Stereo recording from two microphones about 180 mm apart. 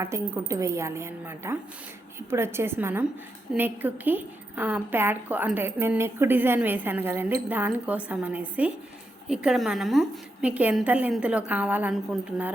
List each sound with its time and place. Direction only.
0.0 s a woman's voice: 15° right (ahead or behind)